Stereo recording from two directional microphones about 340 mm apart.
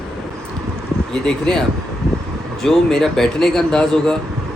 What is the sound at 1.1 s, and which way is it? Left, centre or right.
Speech, centre.